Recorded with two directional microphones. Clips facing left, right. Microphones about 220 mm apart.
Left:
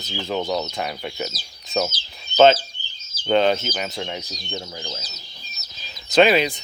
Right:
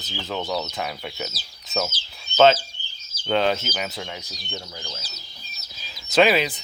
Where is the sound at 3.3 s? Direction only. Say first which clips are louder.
Left 3 dB; centre (ahead or behind).